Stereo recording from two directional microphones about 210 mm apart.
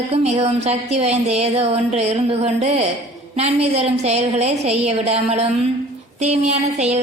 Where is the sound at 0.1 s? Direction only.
30° right (ahead or behind).